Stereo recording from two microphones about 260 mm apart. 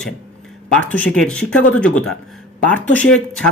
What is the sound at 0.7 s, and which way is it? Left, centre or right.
A man's voice, centre.